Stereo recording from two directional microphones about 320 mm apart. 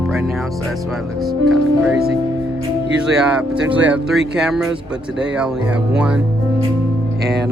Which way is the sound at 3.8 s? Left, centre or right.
Centre.